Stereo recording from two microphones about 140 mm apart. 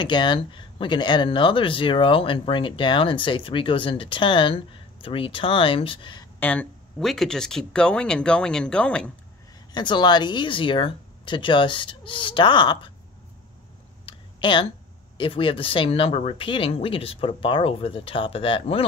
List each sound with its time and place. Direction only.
0.0 s speech: 35° left (ahead or behind)
6.4 s speech: 10° left (ahead or behind)
9.7 s speech: 35° left (ahead or behind)
14.0 s a sound: 35° left (ahead or behind)
15.1 s speech: 40° left (ahead or behind)